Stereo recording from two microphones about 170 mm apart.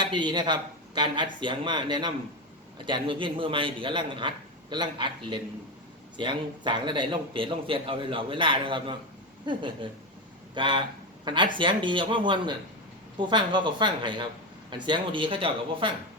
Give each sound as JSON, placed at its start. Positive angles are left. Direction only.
{"t": 0.0, "sound": "a man's voice", "side_deg": -25}